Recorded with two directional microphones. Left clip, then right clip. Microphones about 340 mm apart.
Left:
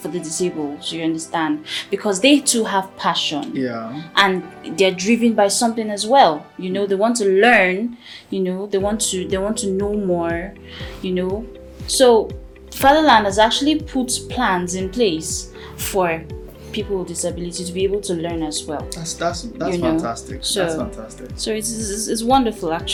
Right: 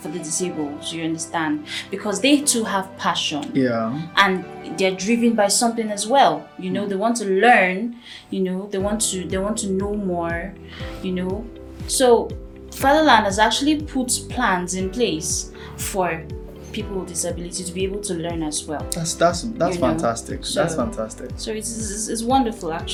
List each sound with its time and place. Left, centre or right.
0.0 s a woman's voice: left
3.4 s speech: right
4.1 s a woman's voice: left
19.0 s speech: right
20.4 s speech: left